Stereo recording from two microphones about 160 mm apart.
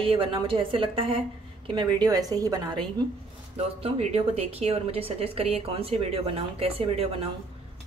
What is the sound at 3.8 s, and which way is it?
A woman's voice, 40° right (ahead or behind).